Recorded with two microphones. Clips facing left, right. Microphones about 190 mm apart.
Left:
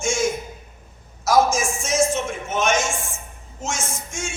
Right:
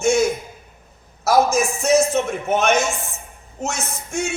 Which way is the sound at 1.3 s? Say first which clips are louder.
Right 2 dB; 60° right (ahead or behind).